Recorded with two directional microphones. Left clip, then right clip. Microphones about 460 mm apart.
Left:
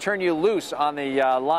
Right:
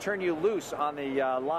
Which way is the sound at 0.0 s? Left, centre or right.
Left.